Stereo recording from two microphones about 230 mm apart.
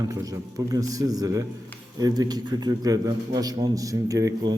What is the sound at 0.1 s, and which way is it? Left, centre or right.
A man's voice, centre.